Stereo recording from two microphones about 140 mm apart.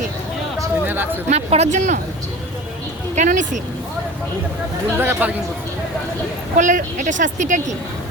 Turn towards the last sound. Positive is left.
turn(degrees=-60)  # may be behind; listen again after turning